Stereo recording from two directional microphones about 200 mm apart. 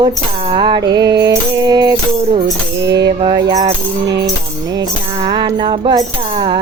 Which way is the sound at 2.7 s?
60° right (ahead or behind).